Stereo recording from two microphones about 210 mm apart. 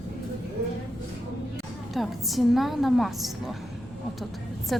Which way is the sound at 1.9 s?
Centre (ahead or behind).